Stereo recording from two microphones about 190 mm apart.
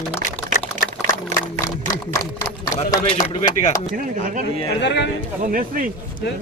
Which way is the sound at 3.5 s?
40° left (ahead or behind).